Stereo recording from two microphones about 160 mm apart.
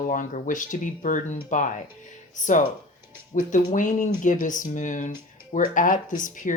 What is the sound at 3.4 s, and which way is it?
Speech, 50° left (ahead or behind).